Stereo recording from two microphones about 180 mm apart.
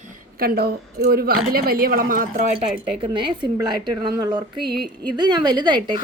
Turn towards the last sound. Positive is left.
turn(degrees=-25)  # may be behind; listen again after turning